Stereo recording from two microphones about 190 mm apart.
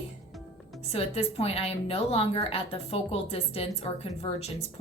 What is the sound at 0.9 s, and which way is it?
A woman's voice, 35° left (ahead or behind).